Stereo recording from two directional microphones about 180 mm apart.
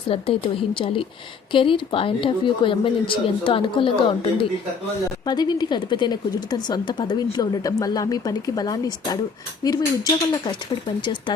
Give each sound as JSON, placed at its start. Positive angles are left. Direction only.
{"t": 0.1, "sound": "a woman's voice", "side_deg": 30}